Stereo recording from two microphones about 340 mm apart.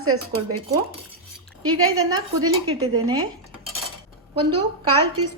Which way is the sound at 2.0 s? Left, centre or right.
Centre.